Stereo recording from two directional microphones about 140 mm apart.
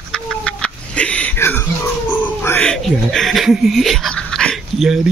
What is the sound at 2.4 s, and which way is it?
Speech, 10° left (ahead or behind).